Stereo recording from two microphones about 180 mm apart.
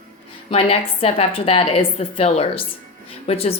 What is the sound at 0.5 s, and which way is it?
A woman's voice, 35° left (ahead or behind).